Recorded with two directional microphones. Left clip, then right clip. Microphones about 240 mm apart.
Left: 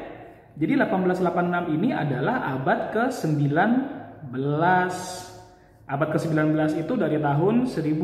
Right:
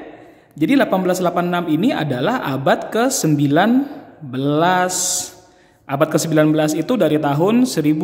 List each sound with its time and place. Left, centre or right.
0.6 s a man's voice: right